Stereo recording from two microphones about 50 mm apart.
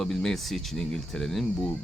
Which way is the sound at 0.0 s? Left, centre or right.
Centre.